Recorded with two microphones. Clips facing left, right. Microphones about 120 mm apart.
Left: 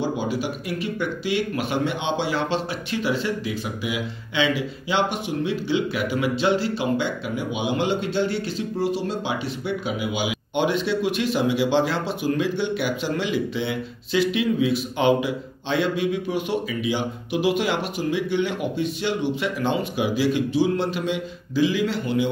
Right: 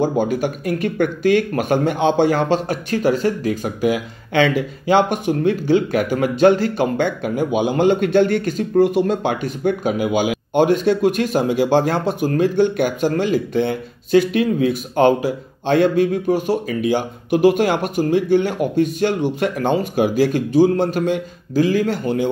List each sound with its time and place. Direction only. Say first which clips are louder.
0.0 s speech: right 7 dB; 50° right (ahead or behind)